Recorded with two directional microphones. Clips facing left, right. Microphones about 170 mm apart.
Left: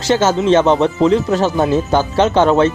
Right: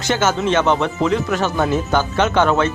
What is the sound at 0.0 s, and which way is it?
Speech, 30° left (ahead or behind).